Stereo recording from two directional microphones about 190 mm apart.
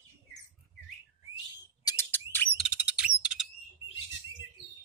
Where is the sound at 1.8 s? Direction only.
10° left (ahead or behind).